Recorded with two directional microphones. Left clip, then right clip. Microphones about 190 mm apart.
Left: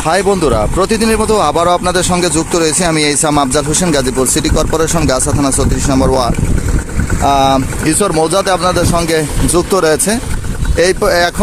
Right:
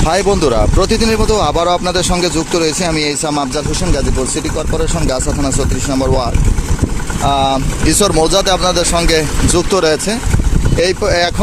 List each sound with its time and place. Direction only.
0.0 s speech: 5° left (ahead or behind); by 4.9 s 30° left (ahead or behind)
5.0 s speech: 15° left (ahead or behind)
7.3 s speech: 35° left (ahead or behind)
7.9 s speech: centre (ahead or behind)